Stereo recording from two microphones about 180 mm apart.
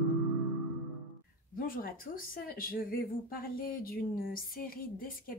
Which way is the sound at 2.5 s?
55° left (ahead or behind).